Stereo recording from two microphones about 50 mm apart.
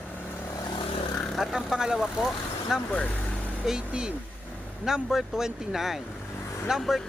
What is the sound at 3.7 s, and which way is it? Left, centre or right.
A man's voice, centre.